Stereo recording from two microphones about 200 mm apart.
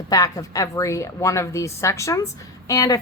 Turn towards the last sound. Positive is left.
turn(degrees=15)  # may be behind; listen again after turning